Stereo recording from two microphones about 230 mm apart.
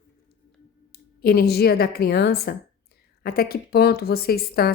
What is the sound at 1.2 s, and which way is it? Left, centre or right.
A woman's voice, left.